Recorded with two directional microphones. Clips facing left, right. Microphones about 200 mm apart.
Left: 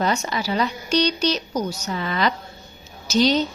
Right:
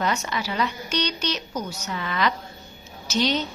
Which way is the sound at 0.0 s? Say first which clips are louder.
Left 3 dB; 30° left (ahead or behind).